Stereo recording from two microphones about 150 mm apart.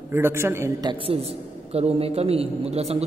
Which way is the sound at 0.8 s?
40° right (ahead or behind).